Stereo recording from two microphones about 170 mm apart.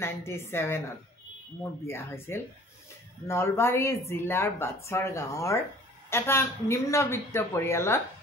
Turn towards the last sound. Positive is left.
turn(degrees=15)  # may be behind; listen again after turning